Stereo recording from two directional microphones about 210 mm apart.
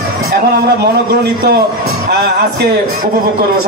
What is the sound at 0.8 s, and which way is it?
Speech, 50° right (ahead or behind).